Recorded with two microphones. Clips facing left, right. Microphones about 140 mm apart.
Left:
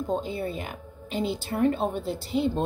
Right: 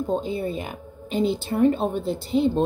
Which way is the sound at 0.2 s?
20° right (ahead or behind).